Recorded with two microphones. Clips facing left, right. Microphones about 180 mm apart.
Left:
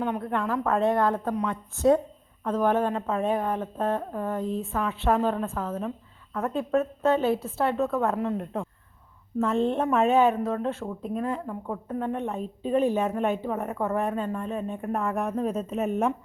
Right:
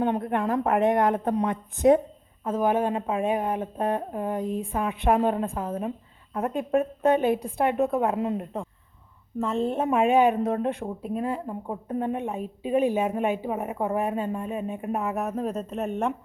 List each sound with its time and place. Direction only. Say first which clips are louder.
0.0 s a woman's voice: right 3 dB; 25° right (ahead or behind)
9.4 s a woman's voice: left 1 dB; centre (ahead or behind)
11.4 s a woman's voice: even; 25° right (ahead or behind); by 16.1 s centre (ahead or behind)